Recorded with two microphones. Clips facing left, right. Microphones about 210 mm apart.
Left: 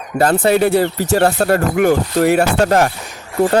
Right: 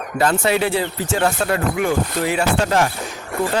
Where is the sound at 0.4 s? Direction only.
50° left (ahead or behind).